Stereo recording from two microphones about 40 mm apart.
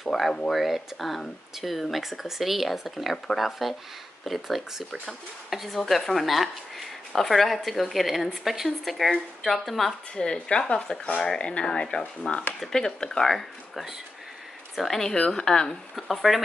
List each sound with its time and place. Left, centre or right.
0.1 s speech: centre
0.5 s speech: centre
10.1 s speech: left
12.5 s speech: centre
13.2 s speech: centre
16.0 s speech: centre